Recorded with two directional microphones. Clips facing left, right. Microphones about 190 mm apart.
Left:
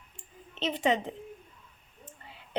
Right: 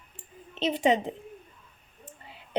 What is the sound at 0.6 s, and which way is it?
Speech, 15° right (ahead or behind).